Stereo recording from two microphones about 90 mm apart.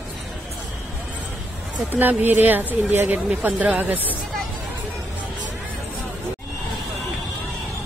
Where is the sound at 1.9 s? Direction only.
20° right (ahead or behind).